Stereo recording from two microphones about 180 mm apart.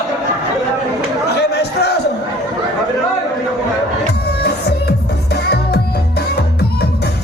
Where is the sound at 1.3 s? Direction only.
70° left (ahead or behind).